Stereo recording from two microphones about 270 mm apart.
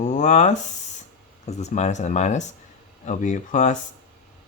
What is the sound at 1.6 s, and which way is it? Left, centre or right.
Speech, left.